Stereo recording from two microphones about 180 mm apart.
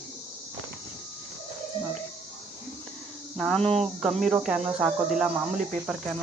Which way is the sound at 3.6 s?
35° right (ahead or behind).